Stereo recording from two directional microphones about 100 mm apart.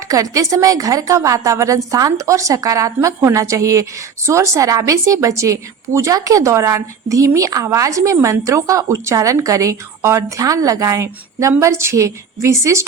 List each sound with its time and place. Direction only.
0.1 s a woman's voice: 35° right (ahead or behind)